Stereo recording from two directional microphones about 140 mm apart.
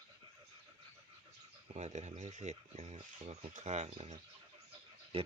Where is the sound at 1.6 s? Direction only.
55° right (ahead or behind).